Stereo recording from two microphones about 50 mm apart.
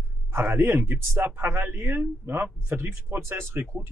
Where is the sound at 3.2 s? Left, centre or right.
Right.